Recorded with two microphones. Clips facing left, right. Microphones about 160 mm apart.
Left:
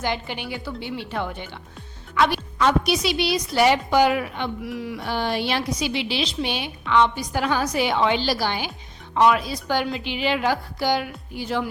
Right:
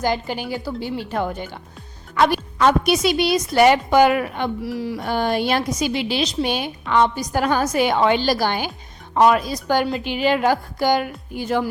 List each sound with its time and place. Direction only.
0.0 s a woman's voice: 40° right (ahead or behind)
4.6 s a woman's voice: 35° right (ahead or behind)
5.0 s a woman's voice: 45° right (ahead or behind)